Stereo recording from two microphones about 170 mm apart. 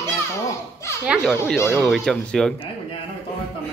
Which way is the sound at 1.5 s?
15° left (ahead or behind).